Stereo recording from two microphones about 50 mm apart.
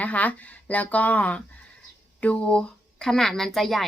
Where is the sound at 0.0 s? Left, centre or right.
Left.